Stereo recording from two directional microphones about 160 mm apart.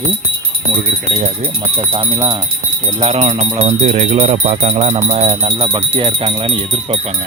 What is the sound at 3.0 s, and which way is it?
Speech, 40° right (ahead or behind).